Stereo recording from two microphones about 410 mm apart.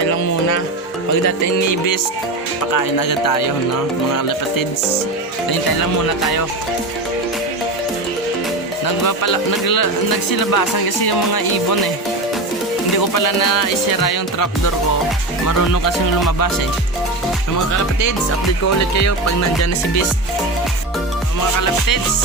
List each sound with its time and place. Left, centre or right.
1.7 s music: left
5.5 s speech: left
9.0 s speech: left
13.0 s music: left
15.4 s music: left
18.8 s music: left